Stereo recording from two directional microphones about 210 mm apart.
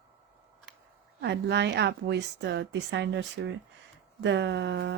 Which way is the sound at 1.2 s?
55° right (ahead or behind).